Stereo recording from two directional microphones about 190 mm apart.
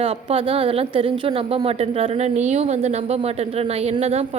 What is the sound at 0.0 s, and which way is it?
A woman's voice, 30° right (ahead or behind).